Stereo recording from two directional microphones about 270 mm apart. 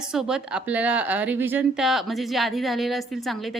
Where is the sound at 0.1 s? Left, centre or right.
Centre.